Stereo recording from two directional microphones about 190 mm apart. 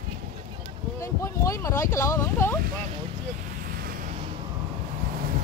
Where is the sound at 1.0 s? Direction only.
15° left (ahead or behind).